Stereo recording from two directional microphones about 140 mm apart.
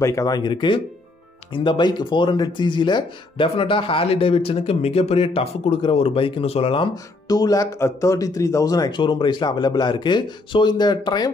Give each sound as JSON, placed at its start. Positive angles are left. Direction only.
{"t": 0.0, "sound": "speech", "side_deg": 25}
{"t": 7.2, "sound": "speech", "side_deg": 25}